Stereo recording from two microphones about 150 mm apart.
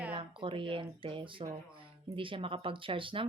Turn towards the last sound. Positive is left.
turn(degrees=-35)  # may be behind; listen again after turning